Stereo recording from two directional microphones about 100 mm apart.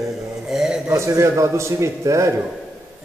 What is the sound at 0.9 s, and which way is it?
A man's voice, 30° right (ahead or behind).